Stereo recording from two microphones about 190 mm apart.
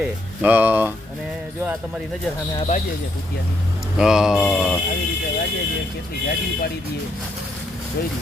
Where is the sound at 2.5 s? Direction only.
30° left (ahead or behind).